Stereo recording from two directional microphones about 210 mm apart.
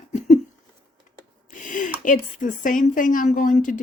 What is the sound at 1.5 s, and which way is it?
Speech, 40° left (ahead or behind).